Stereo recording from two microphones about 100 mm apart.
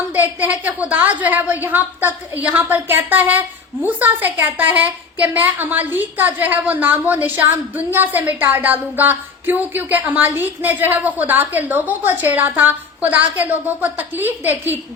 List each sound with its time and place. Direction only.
0.2 s a woman's voice: 15° right (ahead or behind)